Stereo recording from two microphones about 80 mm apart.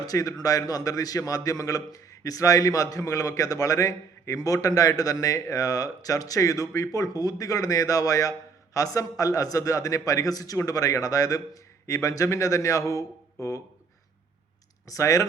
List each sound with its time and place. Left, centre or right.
0.0 s a man's voice: left
14.8 s a man's voice: left